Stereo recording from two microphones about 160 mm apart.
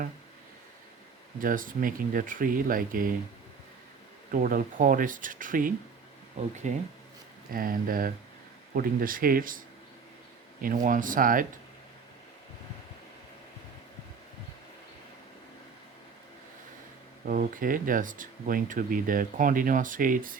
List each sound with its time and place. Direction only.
1.4 s speech: 60° right (ahead or behind)
4.3 s speech: 60° right (ahead or behind)
6.4 s speech: 45° right (ahead or behind)
7.5 s speech: 60° right (ahead or behind)
17.2 s speech: 60° right (ahead or behind)